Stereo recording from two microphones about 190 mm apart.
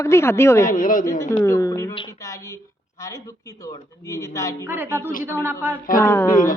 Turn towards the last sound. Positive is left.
turn(degrees=45)  # may be behind; listen again after turning